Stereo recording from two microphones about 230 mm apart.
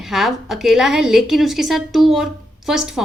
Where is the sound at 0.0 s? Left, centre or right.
Centre.